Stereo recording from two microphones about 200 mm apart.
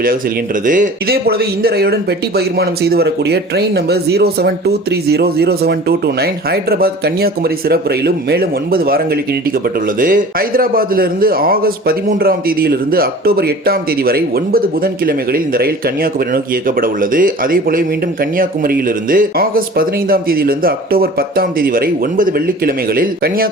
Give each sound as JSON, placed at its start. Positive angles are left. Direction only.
{"t": 0.6, "sound": "a man's voice", "side_deg": -40}
{"t": 10.0, "sound": "a man's voice", "side_deg": -45}